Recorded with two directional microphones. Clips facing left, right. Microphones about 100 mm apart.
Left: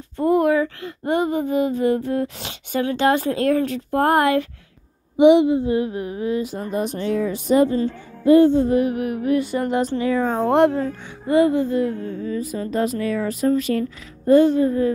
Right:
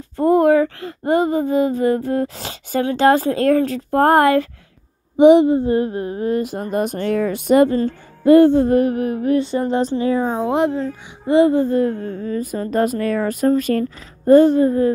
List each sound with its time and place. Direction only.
0.2 s speech: 35° right (ahead or behind)
10.2 s speech: 15° right (ahead or behind)
10.5 s speech: centre (ahead or behind)
11.2 s speech: 25° right (ahead or behind)
11.6 s speech: 40° right (ahead or behind)